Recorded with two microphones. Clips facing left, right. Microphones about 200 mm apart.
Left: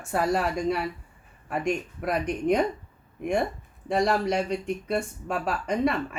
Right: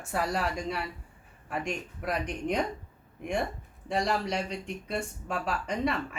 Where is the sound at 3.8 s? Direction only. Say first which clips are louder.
Left 5 dB; 50° left (ahead or behind).